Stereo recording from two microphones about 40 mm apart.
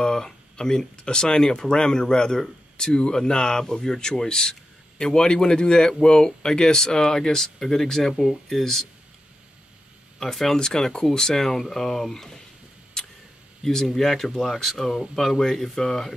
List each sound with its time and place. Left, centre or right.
0.0 s a man's voice: centre
10.1 s speech: centre
10.5 s speech: centre
13.0 s a sound: centre
13.8 s speech: centre